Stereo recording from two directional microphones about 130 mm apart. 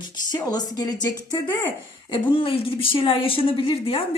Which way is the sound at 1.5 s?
15° left (ahead or behind).